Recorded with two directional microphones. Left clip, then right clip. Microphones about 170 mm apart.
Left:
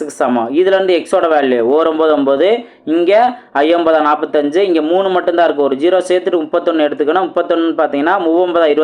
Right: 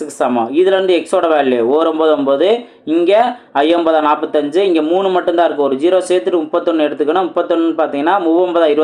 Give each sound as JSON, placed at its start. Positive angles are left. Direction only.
{"t": 0.2, "sound": "speech", "side_deg": 20}